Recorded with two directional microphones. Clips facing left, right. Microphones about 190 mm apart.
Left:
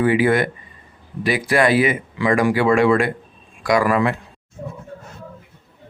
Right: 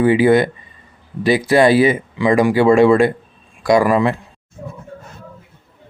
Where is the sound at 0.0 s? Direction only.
25° right (ahead or behind).